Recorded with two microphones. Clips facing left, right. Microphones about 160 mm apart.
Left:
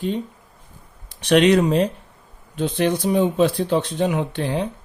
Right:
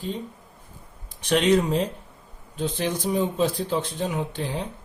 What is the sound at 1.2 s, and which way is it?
Speech, 70° left (ahead or behind).